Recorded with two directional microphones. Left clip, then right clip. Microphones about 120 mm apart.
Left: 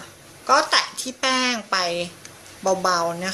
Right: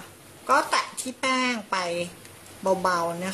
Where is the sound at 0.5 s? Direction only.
10° right (ahead or behind).